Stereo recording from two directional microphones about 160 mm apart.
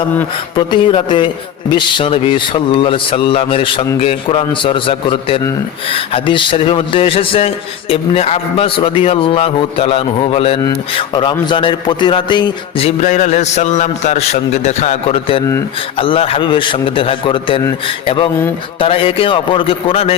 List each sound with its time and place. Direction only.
0.5 s a man's voice: 30° left (ahead or behind)